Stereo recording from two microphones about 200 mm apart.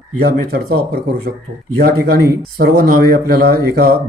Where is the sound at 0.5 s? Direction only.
45° right (ahead or behind).